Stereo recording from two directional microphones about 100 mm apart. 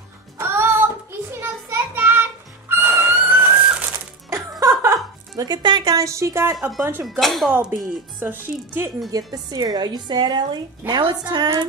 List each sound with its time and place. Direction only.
0.4 s child singing: 25° right (ahead or behind)
2.7 s a sound: 25° right (ahead or behind)
4.3 s music: 30° right (ahead or behind)
5.4 s speech: 45° right (ahead or behind)
5.9 s speech: 30° right (ahead or behind)
7.1 s speech: centre (ahead or behind)
8.2 s speech: 20° right (ahead or behind)
9.1 s speech: 40° right (ahead or behind)